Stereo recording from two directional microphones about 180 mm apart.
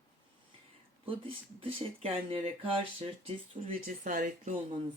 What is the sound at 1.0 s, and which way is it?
Speech, 30° right (ahead or behind).